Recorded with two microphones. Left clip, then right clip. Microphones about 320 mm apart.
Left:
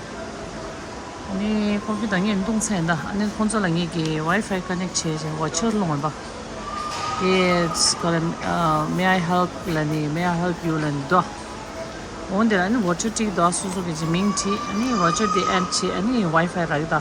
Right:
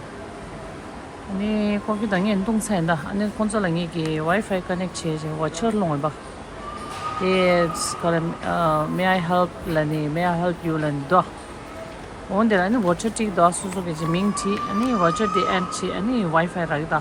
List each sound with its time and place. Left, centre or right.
1.5 s speech: centre
7.3 s speech: centre
12.4 s speech: centre